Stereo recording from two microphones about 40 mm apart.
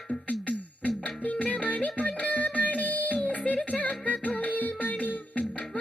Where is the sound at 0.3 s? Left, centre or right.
Left.